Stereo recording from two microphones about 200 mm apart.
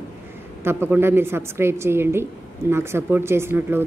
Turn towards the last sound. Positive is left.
turn(degrees=-10)  # may be behind; listen again after turning